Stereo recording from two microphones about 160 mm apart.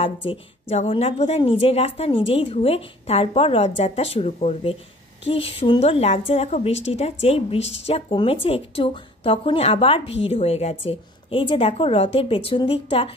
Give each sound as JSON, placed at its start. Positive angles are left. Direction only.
{"t": 0.0, "sound": "a woman's voice", "side_deg": 35}